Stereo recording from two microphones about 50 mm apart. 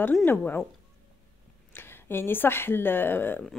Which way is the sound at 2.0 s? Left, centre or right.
Left.